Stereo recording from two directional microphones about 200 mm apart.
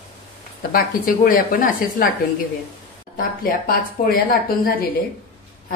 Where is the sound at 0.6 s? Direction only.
45° left (ahead or behind).